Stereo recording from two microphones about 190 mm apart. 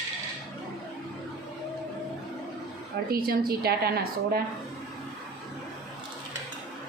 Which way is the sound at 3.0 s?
55° right (ahead or behind).